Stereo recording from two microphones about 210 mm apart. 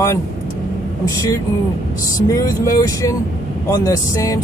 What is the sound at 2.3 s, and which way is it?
Speech, 15° left (ahead or behind).